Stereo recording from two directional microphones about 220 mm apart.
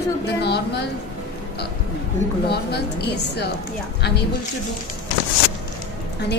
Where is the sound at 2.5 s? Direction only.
50° left (ahead or behind).